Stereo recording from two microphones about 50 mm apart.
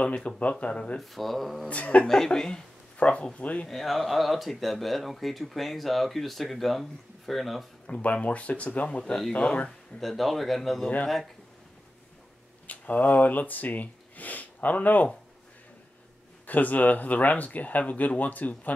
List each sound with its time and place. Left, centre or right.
0.0 s speech: left
0.9 s speech: centre
1.7 s speech: left
2.0 s a woman's voice: centre
3.0 s speech: left
3.6 s speech: centre
8.0 s speech: left
8.8 s a woman's voice: centre
9.9 s speech: centre
12.6 s speech: left
16.4 s speech: left